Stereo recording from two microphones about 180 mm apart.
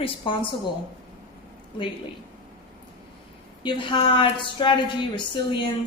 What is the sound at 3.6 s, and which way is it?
A woman's voice, 25° left (ahead or behind).